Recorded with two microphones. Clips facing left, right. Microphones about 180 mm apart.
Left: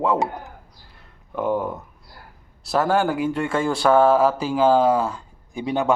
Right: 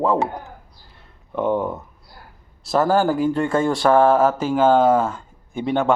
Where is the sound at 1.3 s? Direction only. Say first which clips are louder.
Right 2 dB; 5° left (ahead or behind).